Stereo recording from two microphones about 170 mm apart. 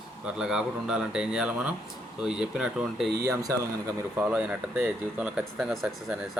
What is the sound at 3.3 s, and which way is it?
Speech, 20° right (ahead or behind).